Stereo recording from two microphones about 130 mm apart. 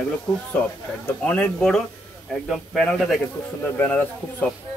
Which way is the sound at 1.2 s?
10° left (ahead or behind).